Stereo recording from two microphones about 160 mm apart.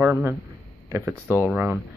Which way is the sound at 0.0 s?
10° right (ahead or behind).